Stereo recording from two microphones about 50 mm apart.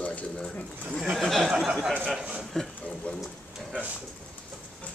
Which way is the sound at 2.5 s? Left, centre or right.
Centre.